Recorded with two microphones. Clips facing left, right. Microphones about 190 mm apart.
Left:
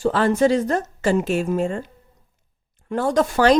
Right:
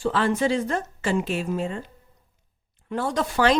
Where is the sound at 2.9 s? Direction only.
45° left (ahead or behind).